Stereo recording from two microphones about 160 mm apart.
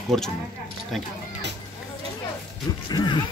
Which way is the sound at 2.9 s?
25° left (ahead or behind).